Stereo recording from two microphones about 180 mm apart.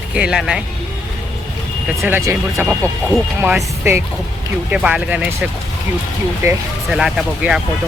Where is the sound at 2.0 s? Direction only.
10° right (ahead or behind).